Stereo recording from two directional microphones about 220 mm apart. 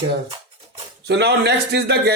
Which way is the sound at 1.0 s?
50° right (ahead or behind).